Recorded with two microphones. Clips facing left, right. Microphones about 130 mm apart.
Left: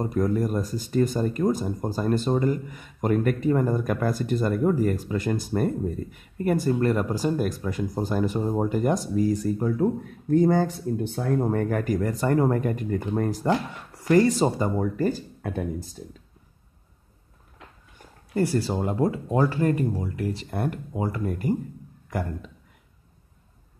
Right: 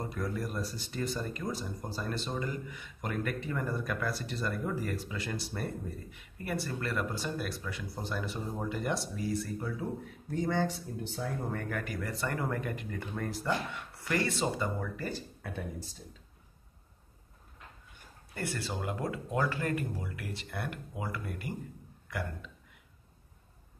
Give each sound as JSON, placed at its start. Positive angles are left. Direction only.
{"t": 0.0, "sound": "speech", "side_deg": 40}
{"t": 18.3, "sound": "speech", "side_deg": 35}